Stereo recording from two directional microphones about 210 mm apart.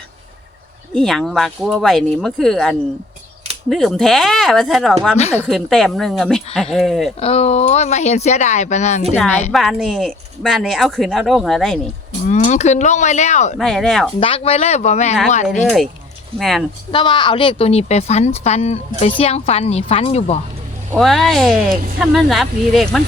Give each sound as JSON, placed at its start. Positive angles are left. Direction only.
{"t": 0.9, "sound": "speech", "side_deg": 0}
{"t": 7.2, "sound": "speech", "side_deg": 30}
{"t": 9.5, "sound": "speech", "side_deg": 0}
{"t": 12.3, "sound": "speech", "side_deg": 35}
{"t": 13.6, "sound": "speech", "side_deg": 0}
{"t": 14.2, "sound": "speech", "side_deg": 25}
{"t": 16.4, "sound": "speech", "side_deg": 0}
{"t": 16.9, "sound": "speech", "side_deg": 20}
{"t": 20.9, "sound": "speech", "side_deg": 0}